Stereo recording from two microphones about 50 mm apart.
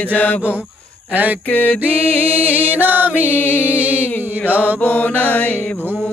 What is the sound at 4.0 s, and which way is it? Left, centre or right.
Mantra, left.